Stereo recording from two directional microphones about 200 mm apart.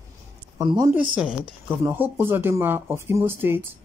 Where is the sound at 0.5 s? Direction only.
20° right (ahead or behind).